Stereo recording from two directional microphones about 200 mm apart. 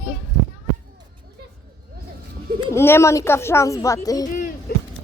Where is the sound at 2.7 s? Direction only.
10° left (ahead or behind).